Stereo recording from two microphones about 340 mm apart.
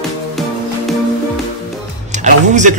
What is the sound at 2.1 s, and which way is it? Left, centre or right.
Music, right.